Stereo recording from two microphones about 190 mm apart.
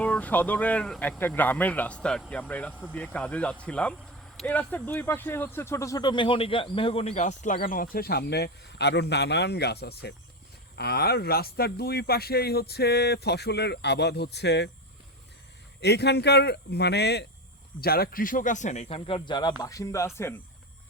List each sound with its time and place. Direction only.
0.0 s speech: 10° left (ahead or behind); by 14.7 s 60° left (ahead or behind)
15.8 s speech: 60° left (ahead or behind); by 20.3 s 15° left (ahead or behind)